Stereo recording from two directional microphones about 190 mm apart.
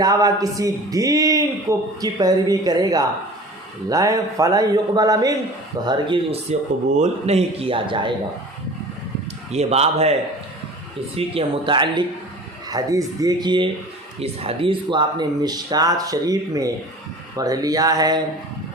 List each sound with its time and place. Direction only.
0.0 s speech: 20° right (ahead or behind)
6.5 s speech: 35° right (ahead or behind)
9.5 s speech: 35° right (ahead or behind)
11.2 s speech: 25° right (ahead or behind)